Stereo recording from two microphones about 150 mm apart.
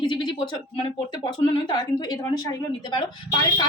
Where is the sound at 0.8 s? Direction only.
35° left (ahead or behind).